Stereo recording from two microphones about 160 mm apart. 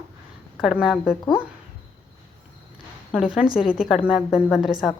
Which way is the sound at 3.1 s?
5° right (ahead or behind).